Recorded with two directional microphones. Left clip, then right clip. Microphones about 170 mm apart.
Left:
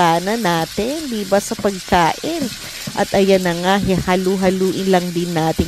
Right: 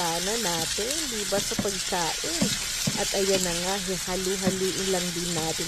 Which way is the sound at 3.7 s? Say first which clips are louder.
Left 13 dB; 50° left (ahead or behind).